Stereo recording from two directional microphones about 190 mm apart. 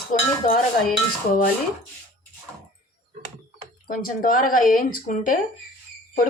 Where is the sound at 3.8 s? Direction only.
45° left (ahead or behind).